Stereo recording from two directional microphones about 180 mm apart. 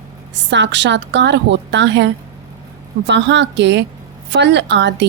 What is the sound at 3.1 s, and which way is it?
A woman's voice, 75° right (ahead or behind).